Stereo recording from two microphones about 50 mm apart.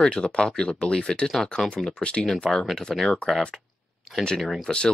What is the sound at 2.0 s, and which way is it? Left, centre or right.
Speech, left.